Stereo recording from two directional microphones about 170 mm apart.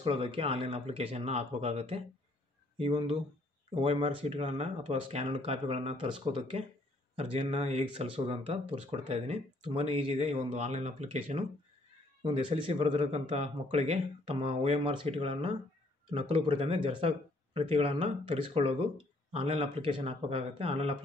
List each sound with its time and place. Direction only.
0.0 s speech: 30° right (ahead or behind)